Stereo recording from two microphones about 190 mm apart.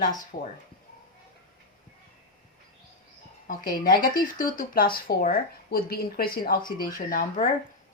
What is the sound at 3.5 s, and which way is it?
Speech, 45° left (ahead or behind).